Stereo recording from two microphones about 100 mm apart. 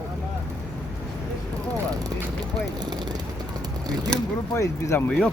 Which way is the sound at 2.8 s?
45° right (ahead or behind).